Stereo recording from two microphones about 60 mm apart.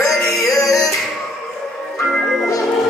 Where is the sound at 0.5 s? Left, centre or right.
Left.